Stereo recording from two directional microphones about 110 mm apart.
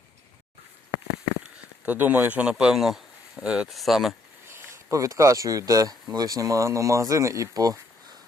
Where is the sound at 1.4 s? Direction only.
15° right (ahead or behind).